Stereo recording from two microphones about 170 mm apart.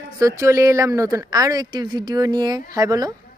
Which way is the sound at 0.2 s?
20° right (ahead or behind).